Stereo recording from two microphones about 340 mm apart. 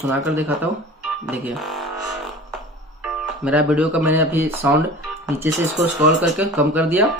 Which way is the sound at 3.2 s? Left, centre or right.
Centre.